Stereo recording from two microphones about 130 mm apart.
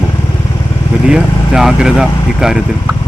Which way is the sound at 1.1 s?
5° right (ahead or behind).